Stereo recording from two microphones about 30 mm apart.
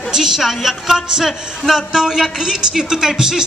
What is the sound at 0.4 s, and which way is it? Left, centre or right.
Speech, centre.